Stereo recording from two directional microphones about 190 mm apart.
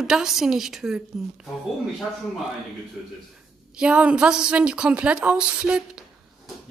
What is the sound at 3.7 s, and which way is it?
A woman's voice, 5° right (ahead or behind).